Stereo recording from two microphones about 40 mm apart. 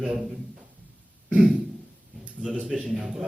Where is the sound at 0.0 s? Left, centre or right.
Centre.